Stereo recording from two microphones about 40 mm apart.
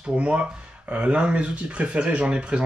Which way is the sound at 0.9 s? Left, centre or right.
Right.